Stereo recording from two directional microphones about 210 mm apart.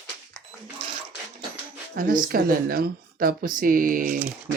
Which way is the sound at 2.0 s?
40° right (ahead or behind).